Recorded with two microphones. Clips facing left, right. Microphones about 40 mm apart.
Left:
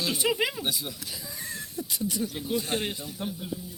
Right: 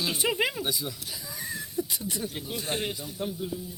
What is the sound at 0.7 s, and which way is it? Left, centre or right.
Speech, left.